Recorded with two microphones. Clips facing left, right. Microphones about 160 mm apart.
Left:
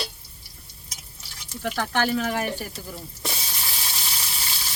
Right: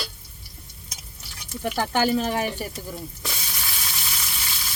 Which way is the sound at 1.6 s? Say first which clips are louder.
Right 2 dB; 10° right (ahead or behind).